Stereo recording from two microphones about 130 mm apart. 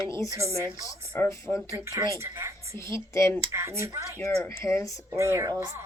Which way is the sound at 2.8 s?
20° left (ahead or behind).